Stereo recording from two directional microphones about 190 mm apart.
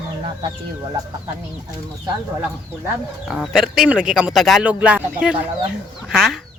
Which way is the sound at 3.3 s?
Centre (ahead or behind).